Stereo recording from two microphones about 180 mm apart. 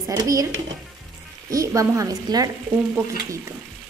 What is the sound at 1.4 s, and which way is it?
A woman's voice, 20° right (ahead or behind).